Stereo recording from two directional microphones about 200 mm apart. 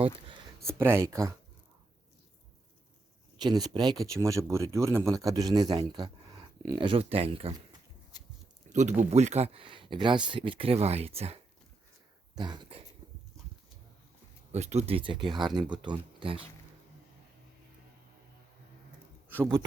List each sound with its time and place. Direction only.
0.7 s speech: 10° right (ahead or behind)
3.4 s speech: 20° right (ahead or behind)
8.7 s speech: 35° right (ahead or behind)
12.4 s speech: 20° right (ahead or behind)
14.5 s speech: 35° right (ahead or behind)